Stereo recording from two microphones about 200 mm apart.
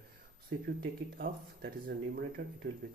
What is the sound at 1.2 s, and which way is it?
Speech, 50° right (ahead or behind).